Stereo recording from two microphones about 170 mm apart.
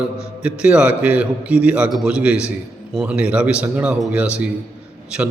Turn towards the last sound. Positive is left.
turn(degrees=-5)  # may be behind; listen again after turning